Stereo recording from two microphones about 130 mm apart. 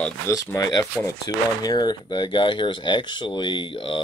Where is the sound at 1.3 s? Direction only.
30° left (ahead or behind).